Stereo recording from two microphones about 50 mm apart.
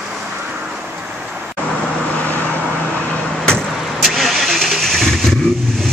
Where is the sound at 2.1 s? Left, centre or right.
Left.